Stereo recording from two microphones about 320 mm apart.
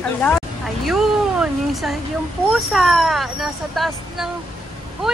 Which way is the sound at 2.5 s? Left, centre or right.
Centre.